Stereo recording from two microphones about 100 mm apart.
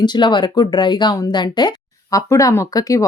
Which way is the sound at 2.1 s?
35° left (ahead or behind).